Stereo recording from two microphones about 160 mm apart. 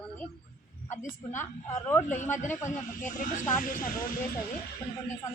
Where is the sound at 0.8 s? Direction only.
50° left (ahead or behind).